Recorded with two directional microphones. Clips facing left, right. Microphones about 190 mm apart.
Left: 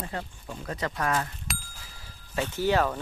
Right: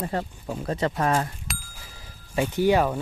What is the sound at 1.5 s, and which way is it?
Bicycle bell, centre (ahead or behind).